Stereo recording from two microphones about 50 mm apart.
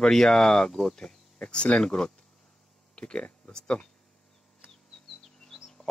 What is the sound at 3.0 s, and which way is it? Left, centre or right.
Speech, left.